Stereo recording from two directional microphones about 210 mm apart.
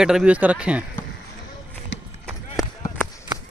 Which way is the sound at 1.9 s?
60° left (ahead or behind).